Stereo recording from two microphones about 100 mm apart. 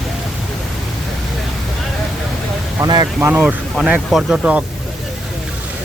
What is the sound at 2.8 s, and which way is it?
Vehicle, 40° right (ahead or behind).